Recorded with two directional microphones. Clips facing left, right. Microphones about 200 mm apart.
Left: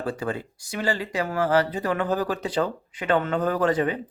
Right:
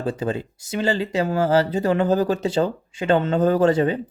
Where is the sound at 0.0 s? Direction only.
20° right (ahead or behind).